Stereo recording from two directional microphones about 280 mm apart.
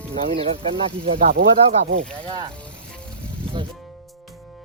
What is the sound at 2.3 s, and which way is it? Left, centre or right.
Speech, centre.